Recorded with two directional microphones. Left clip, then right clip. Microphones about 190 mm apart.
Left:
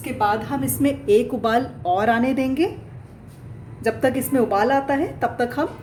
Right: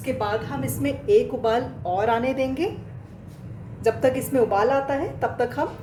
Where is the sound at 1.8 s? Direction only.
50° left (ahead or behind).